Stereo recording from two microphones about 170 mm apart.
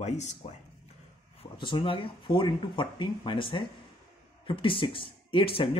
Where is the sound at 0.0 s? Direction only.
45° left (ahead or behind).